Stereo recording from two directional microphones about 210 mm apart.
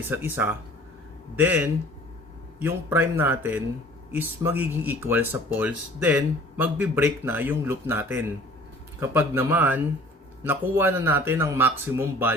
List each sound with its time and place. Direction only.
0.1 s speech: 10° right (ahead or behind)